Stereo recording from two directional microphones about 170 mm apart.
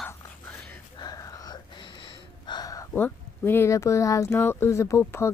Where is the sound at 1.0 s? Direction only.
20° left (ahead or behind).